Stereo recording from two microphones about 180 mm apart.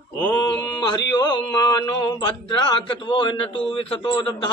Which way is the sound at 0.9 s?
25° left (ahead or behind).